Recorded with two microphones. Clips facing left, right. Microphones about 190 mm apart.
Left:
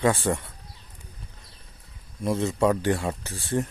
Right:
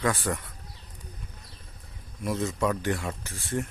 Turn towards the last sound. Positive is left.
turn(degrees=30)  # may be behind; listen again after turning